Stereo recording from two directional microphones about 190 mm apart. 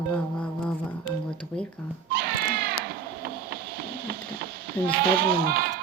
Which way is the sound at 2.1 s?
50° right (ahead or behind).